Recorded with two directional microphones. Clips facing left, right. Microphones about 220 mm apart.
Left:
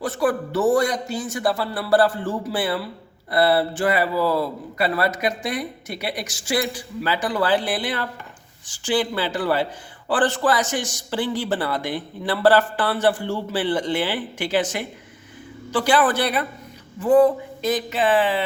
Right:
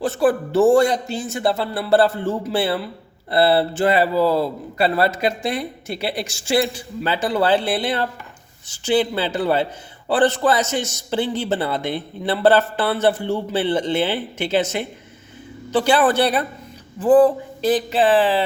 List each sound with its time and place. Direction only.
0.0 s a man's voice: 30° right (ahead or behind)